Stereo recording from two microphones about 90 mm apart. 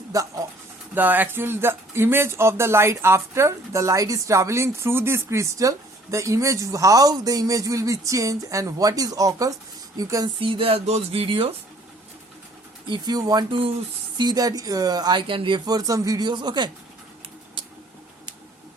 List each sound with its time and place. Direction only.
0.1 s speech: 40° right (ahead or behind)
0.9 s speech: 20° right (ahead or behind); by 10.2 s 40° right (ahead or behind)
10.4 s speech: 80° right
12.9 s speech: 45° right (ahead or behind)
13.5 s speech: 90° right
14.2 s speech: 50° right (ahead or behind); by 15.6 s 65° right (ahead or behind)
15.6 s speech: 45° right (ahead or behind)